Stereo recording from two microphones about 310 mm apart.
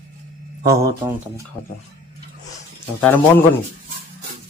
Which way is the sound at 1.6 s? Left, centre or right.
Centre.